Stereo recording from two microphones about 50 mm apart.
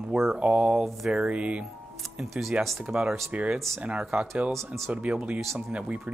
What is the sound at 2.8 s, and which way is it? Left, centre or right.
Speech, centre.